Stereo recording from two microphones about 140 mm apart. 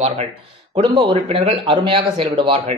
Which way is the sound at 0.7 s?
40° right (ahead or behind).